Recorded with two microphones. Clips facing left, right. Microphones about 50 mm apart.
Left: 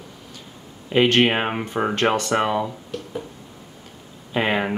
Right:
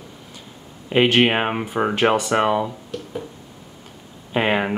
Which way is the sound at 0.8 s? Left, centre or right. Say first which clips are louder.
Right 1 dB; centre.